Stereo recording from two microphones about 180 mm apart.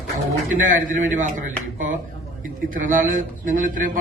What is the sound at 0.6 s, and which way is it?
A man's voice, 45° right (ahead or behind).